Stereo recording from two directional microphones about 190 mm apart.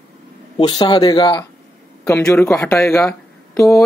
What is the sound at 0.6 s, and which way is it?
Speech, 25° left (ahead or behind).